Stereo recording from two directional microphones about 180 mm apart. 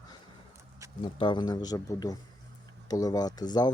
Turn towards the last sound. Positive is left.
turn(degrees=20)  # may be behind; listen again after turning